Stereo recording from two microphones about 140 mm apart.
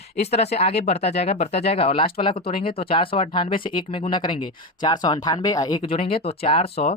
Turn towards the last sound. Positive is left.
turn(degrees=45)  # may be behind; listen again after turning